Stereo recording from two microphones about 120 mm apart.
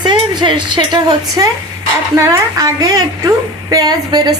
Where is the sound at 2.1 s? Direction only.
25° right (ahead or behind).